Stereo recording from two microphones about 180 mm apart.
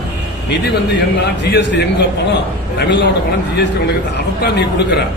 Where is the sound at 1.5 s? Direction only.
75° left (ahead or behind).